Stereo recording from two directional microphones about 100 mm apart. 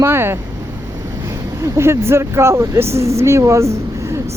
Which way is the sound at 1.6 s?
25° right (ahead or behind).